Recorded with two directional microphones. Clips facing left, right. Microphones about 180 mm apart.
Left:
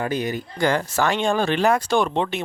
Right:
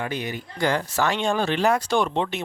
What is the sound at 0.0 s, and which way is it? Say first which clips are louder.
Speech: left 5 dB; 40° left (ahead or behind).